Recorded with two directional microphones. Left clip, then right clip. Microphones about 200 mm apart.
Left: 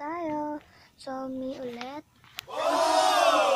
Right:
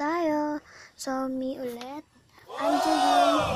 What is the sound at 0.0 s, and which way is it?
Child singing, 35° right (ahead or behind).